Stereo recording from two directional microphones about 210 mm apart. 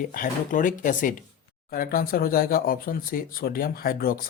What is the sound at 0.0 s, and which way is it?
Speech, 40° left (ahead or behind).